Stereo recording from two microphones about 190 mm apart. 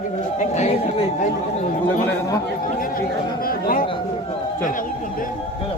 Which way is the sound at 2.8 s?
50° left (ahead or behind).